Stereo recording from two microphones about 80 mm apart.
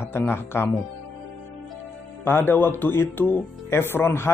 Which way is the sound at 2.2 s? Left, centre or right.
Left.